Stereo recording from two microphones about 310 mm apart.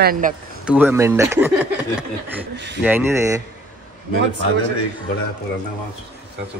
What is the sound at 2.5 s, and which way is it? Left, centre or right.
Speech, right.